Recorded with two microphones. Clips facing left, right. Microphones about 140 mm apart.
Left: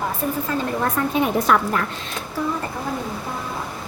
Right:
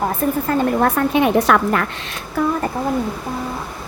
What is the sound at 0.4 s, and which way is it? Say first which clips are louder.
A woman's voice: right 8 dB; 70° right (ahead or behind).